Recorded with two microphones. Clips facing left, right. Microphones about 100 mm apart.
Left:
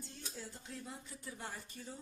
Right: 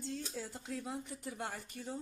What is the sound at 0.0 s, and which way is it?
Speech, 90° right.